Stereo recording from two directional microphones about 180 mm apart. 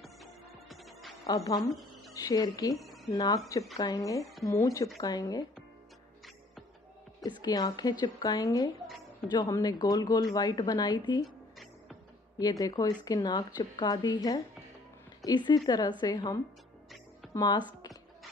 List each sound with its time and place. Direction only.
0.0 s music: centre (ahead or behind)
1.2 s a woman's voice: 20° left (ahead or behind)
1.6 s speech: centre (ahead or behind)
2.1 s speech: 20° left (ahead or behind)
2.7 s speech: centre (ahead or behind)
3.1 s speech: 20° left (ahead or behind)
7.4 s speech: 20° left (ahead or behind)
12.4 s speech: 20° left (ahead or behind)